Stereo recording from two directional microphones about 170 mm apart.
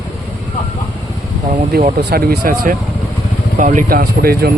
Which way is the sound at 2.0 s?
70° right (ahead or behind).